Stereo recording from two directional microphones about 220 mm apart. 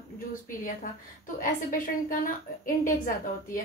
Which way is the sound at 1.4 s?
40° left (ahead or behind).